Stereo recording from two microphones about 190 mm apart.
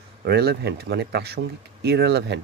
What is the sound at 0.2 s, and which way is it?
Speech, 55° right (ahead or behind).